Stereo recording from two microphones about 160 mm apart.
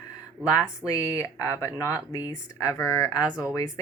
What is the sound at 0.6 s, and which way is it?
Speech, 20° left (ahead or behind).